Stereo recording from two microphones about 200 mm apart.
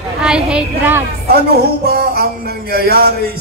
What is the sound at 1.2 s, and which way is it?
Music, 50° right (ahead or behind).